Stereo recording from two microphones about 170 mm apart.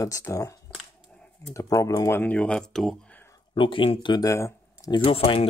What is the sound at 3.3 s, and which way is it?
Speech, 30° left (ahead or behind).